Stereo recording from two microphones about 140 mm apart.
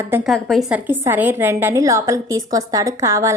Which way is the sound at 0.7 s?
15° right (ahead or behind).